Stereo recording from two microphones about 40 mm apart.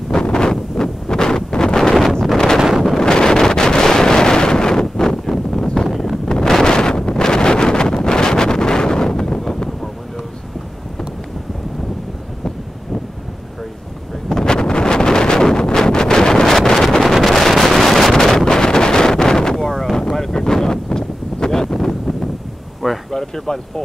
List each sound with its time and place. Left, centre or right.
0.1 s wind noise: left
14.3 s wind noise: centre
21.7 s wind noise: centre
23.1 s a sound: centre